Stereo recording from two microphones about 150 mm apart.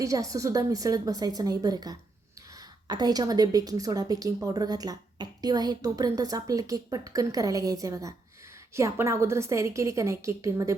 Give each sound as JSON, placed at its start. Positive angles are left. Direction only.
{"t": 0.0, "sound": "a woman's voice", "side_deg": -20}